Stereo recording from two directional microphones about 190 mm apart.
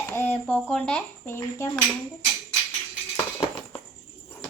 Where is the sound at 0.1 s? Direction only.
10° left (ahead or behind).